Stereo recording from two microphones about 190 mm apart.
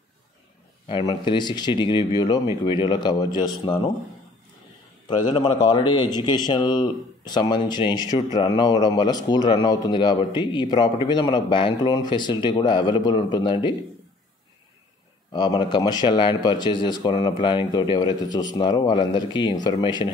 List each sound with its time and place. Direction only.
0.8 s a man's voice: 25° left (ahead or behind)
5.0 s a man's voice: 25° left (ahead or behind)
15.3 s a man's voice: 25° left (ahead or behind)